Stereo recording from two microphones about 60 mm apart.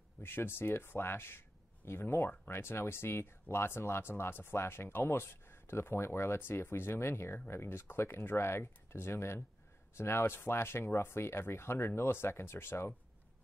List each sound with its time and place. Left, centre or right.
0.2 s speech: left